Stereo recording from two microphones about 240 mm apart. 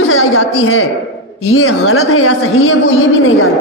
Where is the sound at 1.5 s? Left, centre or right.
Left.